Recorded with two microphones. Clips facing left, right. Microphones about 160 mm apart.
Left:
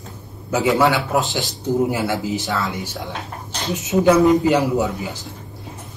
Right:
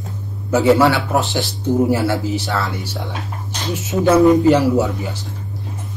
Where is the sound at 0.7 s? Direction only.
20° left (ahead or behind).